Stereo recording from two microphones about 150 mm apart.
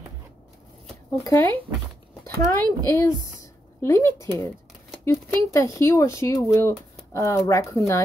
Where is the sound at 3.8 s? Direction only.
15° left (ahead or behind).